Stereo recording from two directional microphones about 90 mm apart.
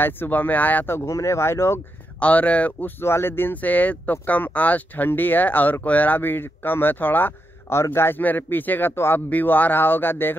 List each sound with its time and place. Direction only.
0.0 s speech: 20° left (ahead or behind)
2.1 s speech: 15° left (ahead or behind)
3.0 s speech: 25° left (ahead or behind)